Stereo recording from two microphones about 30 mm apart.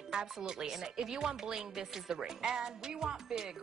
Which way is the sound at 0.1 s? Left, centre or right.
Right.